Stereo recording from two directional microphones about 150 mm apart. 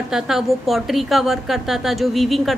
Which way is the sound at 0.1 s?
Centre (ahead or behind).